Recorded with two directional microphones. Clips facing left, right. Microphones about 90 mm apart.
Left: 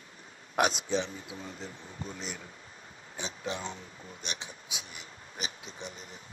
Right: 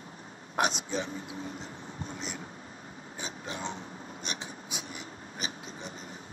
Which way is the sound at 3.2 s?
45° right (ahead or behind).